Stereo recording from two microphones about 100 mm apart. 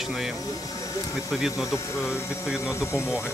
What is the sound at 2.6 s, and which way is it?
Speech, 25° left (ahead or behind).